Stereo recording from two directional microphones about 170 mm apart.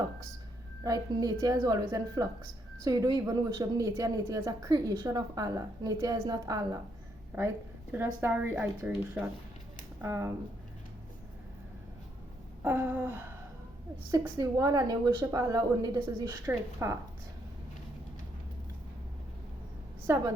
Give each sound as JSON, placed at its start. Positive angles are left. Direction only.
{"t": 0.9, "sound": "a woman's voice", "side_deg": -20}
{"t": 12.6, "sound": "a woman's voice", "side_deg": -10}